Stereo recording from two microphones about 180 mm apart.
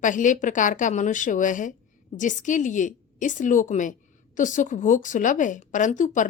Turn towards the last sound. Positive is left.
turn(degrees=45)  # may be behind; listen again after turning